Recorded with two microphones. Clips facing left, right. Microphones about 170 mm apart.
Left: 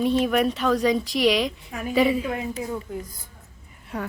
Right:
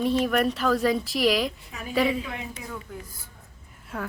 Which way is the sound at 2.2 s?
40° left (ahead or behind).